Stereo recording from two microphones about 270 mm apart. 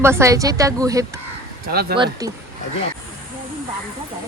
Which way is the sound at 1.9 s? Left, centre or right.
Centre.